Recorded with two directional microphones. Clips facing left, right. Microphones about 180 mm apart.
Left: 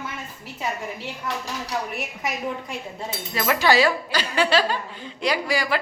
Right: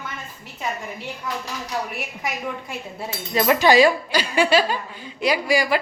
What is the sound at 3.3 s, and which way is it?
Speech, 20° right (ahead or behind).